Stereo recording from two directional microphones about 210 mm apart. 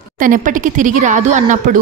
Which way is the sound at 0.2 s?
40° right (ahead or behind).